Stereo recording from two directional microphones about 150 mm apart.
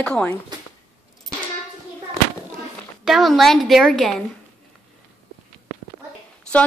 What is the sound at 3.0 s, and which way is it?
A woman's voice, centre (ahead or behind).